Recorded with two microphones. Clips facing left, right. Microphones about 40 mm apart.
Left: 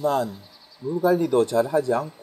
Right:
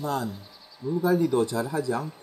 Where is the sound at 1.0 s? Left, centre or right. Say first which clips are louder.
Left 4 dB; left.